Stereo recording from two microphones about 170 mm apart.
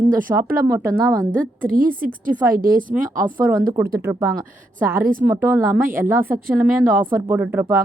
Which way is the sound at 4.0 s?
15° right (ahead or behind).